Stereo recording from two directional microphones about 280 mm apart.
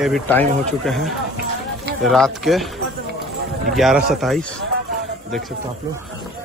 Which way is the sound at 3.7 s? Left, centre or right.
Centre.